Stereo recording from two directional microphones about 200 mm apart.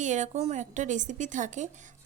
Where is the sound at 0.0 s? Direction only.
35° right (ahead or behind).